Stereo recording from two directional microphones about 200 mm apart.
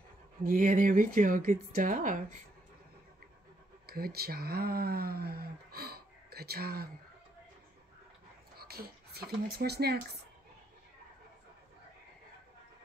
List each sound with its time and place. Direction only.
0.4 s speech: 40° right (ahead or behind)
3.8 s speech: 50° right (ahead or behind)
8.5 s speech: 50° right (ahead or behind)